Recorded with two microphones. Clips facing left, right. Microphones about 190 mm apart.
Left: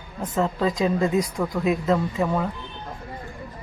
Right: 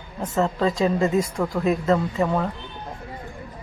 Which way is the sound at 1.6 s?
5° left (ahead or behind).